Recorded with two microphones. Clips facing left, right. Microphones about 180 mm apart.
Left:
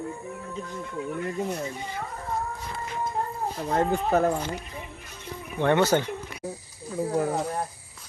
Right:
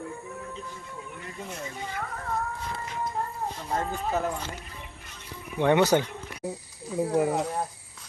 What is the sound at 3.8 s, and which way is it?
Speech, 55° left (ahead or behind).